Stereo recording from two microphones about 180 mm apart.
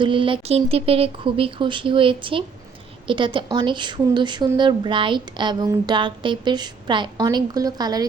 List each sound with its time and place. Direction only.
0.0 s a woman's voice: 30° right (ahead or behind)